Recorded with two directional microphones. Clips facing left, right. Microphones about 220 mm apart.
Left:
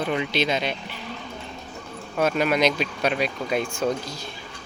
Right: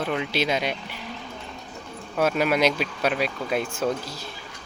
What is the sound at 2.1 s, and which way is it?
Speech, 5° right (ahead or behind).